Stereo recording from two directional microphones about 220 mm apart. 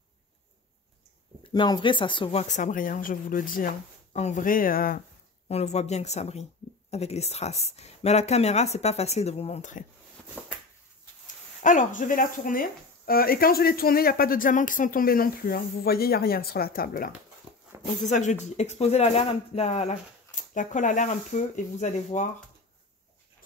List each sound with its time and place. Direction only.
1.4 s speech: 20° left (ahead or behind); by 5.0 s 40° left (ahead or behind)
5.5 s speech: 30° left (ahead or behind)
11.6 s speech: 35° left (ahead or behind)
17.5 s dog: 25° right (ahead or behind)
18.1 s speech: 30° left (ahead or behind)